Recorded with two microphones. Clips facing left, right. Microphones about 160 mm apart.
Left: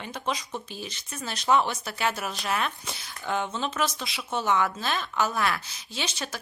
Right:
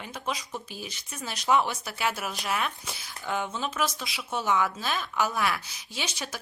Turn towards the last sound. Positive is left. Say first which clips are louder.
# left 2 dB
turn(degrees=-10)  # may be behind; listen again after turning